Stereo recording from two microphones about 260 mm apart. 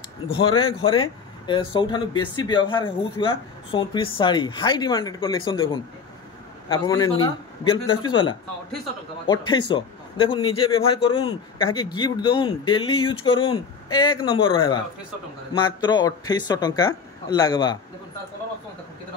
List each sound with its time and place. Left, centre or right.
0.4 s a man's voice: centre
6.7 s a man's voice: centre